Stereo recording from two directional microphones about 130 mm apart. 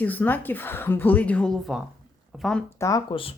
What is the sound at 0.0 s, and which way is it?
A woman's voice, 15° left (ahead or behind).